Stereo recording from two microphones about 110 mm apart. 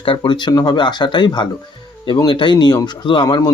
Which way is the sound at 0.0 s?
55° left (ahead or behind).